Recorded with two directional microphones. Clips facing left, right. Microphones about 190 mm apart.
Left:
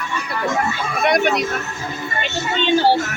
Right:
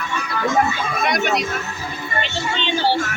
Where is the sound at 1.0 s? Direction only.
60° left (ahead or behind).